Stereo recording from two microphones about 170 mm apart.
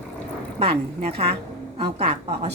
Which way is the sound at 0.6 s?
35° right (ahead or behind).